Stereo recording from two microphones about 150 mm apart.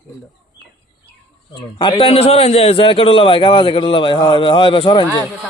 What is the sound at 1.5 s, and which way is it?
A man's voice, 30° left (ahead or behind).